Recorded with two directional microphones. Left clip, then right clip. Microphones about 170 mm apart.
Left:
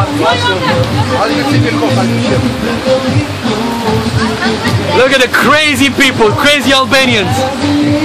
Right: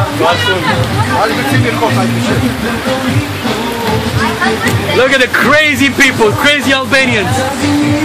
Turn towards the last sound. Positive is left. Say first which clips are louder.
# left 2 dB
turn(degrees=15)  # may be behind; listen again after turning